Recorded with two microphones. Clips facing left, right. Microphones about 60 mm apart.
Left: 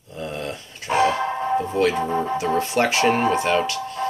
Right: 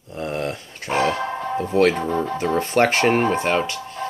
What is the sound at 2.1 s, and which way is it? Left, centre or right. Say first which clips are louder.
Speech: even; centre.